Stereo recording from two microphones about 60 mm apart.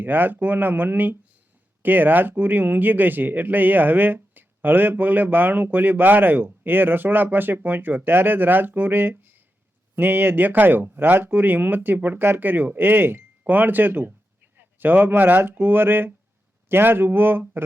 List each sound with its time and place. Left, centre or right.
0.0 s speech: right